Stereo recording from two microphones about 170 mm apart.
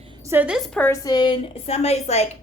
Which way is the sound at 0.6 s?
10° left (ahead or behind).